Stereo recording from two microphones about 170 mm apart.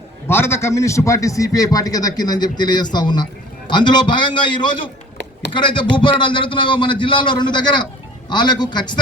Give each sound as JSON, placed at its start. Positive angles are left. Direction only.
{"t": 0.3, "sound": "a man's voice", "side_deg": 15}